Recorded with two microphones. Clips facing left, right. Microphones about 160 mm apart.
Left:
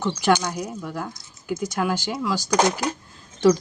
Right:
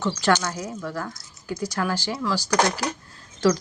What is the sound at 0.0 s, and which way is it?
Speech, 15° left (ahead or behind).